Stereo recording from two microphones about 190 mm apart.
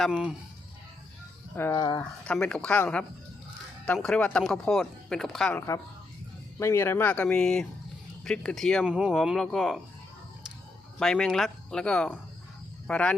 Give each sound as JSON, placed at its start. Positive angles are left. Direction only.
{"t": 0.0, "sound": "speech", "side_deg": -5}
{"t": 1.5, "sound": "speech", "side_deg": 15}
{"t": 2.2, "sound": "speech", "side_deg": 5}
{"t": 11.0, "sound": "speech", "side_deg": 5}